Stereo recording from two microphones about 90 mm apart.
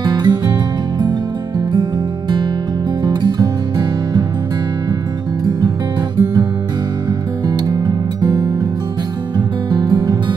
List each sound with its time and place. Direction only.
0.0 s music: 55° right (ahead or behind)
7.4 s music: 50° right (ahead or behind)
9.7 s music: 55° right (ahead or behind)